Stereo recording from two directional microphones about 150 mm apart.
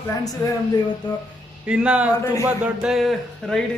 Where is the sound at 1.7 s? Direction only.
5° right (ahead or behind).